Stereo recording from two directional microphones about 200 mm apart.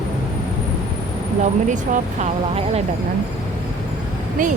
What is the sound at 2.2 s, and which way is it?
Speech, 30° right (ahead or behind).